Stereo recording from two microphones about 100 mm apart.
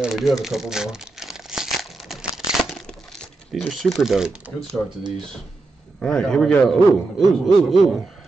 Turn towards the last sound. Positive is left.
turn(degrees=0)  # may be behind; listen again after turning